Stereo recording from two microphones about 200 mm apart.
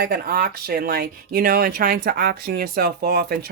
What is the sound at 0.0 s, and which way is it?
Speech, 50° right (ahead or behind).